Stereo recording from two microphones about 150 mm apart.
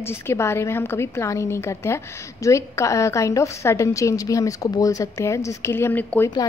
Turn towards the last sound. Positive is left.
turn(degrees=10)  # may be behind; listen again after turning